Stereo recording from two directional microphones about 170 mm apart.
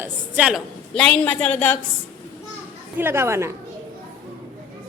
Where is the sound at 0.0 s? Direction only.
5° right (ahead or behind).